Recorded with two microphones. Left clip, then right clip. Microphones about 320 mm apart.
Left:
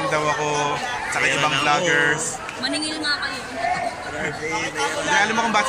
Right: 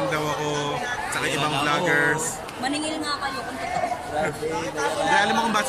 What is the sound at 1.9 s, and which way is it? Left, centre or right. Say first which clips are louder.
Speech: left 2 dB; centre.